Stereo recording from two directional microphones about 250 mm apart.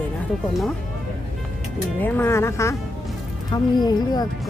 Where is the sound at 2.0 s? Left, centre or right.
Centre.